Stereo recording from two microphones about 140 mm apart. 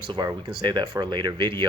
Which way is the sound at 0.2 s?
30° right (ahead or behind).